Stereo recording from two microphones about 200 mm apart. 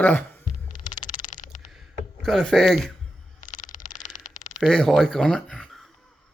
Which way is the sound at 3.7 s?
20° left (ahead or behind).